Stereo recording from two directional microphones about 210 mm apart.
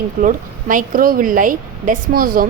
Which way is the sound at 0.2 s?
40° right (ahead or behind).